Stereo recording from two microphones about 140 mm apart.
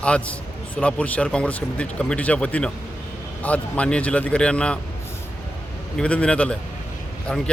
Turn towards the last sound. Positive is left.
turn(degrees=5)  # may be behind; listen again after turning